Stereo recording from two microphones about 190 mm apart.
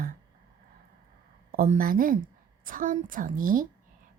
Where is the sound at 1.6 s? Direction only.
45° right (ahead or behind).